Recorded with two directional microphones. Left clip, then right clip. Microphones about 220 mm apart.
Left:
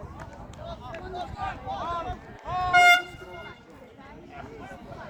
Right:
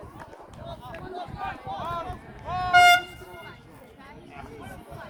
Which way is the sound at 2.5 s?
30° right (ahead or behind).